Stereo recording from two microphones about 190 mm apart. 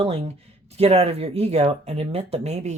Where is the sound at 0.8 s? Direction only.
30° right (ahead or behind).